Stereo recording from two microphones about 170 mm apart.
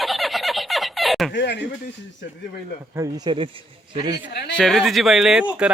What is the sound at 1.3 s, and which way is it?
Speech, 90° left.